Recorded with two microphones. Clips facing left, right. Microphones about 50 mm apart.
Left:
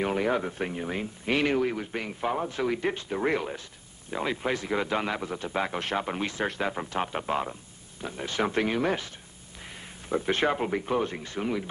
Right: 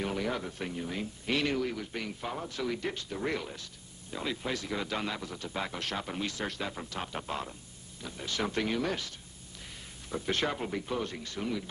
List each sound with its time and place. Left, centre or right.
0.0 s speech: left